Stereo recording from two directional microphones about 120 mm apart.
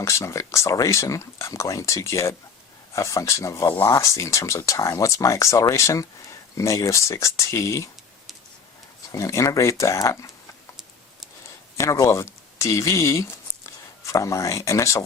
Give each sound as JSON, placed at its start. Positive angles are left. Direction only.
{"t": 0.0, "sound": "speech", "side_deg": 25}
{"t": 9.1, "sound": "speech", "side_deg": 25}
{"t": 11.8, "sound": "speech", "side_deg": 25}